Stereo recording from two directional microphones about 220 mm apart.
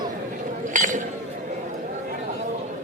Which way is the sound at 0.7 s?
35° right (ahead or behind).